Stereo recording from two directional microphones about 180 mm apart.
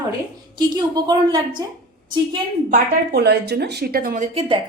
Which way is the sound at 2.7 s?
60° right (ahead or behind).